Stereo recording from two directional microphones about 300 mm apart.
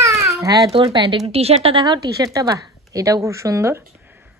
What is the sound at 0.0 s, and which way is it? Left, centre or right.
A child's voice, centre.